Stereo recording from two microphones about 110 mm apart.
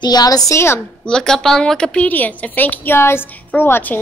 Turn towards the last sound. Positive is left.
turn(degrees=15)  # may be behind; listen again after turning